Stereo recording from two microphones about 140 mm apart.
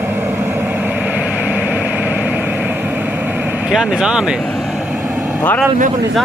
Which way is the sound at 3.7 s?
5° right (ahead or behind).